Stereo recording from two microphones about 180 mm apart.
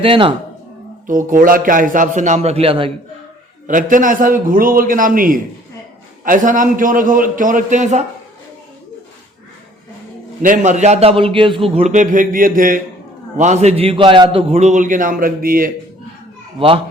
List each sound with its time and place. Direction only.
0.0 s speech: 30° right (ahead or behind)
1.0 s a man's voice: 50° right (ahead or behind); by 2.9 s 30° right (ahead or behind)
3.7 s a man's voice: 45° right (ahead or behind)
10.4 s a man's voice: 45° right (ahead or behind)
16.6 s speech: 30° right (ahead or behind)